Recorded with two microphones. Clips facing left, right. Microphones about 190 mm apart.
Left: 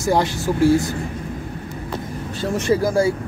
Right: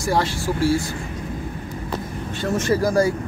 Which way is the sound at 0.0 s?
20° left (ahead or behind).